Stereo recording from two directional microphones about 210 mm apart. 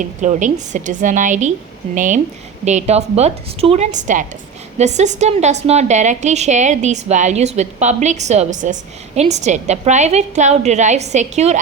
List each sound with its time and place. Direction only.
0.0 s a woman's voice: 35° right (ahead or behind)